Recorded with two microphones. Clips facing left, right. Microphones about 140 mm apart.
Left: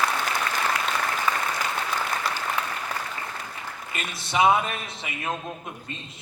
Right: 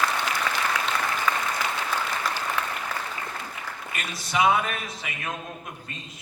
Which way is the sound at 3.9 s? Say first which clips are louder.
Left 1 dB; 25° left (ahead or behind).